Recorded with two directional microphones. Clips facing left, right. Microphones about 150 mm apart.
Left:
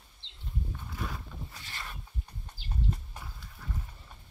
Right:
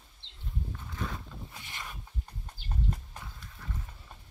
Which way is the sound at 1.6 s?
15° right (ahead or behind).